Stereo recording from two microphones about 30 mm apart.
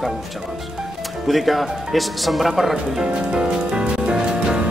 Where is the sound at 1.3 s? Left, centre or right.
Centre.